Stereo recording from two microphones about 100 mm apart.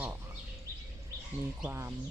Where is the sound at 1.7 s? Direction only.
25° right (ahead or behind).